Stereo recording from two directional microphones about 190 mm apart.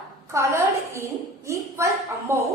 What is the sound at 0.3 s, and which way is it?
A woman's voice, 15° right (ahead or behind).